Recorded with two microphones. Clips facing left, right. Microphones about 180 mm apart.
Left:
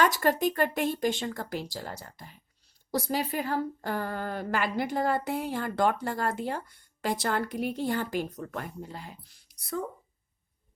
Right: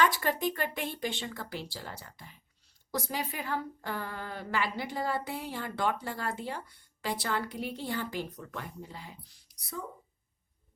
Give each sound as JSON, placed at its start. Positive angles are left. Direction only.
{"t": 0.0, "sound": "a woman's voice", "side_deg": 45}